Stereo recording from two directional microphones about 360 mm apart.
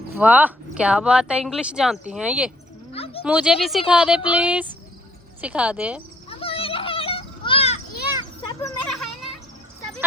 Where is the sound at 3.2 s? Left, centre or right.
Centre.